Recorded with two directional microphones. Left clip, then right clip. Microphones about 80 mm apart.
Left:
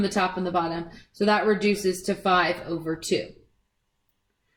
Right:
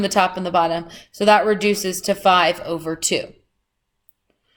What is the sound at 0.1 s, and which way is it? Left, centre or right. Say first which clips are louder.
Speech: right 7 dB; right.